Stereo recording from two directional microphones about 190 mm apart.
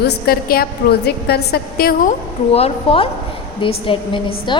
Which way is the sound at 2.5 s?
30° left (ahead or behind).